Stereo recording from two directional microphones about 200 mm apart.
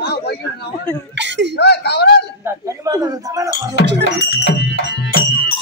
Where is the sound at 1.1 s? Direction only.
60° right (ahead or behind).